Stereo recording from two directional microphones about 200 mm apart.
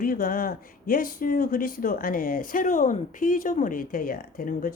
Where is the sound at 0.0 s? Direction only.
45° left (ahead or behind).